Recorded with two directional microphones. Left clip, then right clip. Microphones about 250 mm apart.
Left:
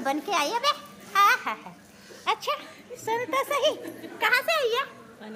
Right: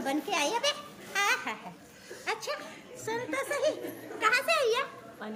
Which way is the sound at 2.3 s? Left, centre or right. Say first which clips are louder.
Left 7 dB; left.